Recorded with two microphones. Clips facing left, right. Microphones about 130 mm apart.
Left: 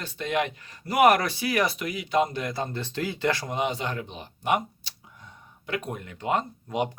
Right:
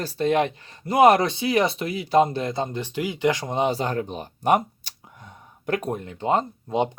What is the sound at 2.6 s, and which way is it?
Speech, 15° right (ahead or behind).